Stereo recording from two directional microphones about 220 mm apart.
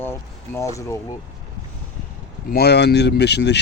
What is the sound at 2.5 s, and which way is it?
Speech, 45° left (ahead or behind).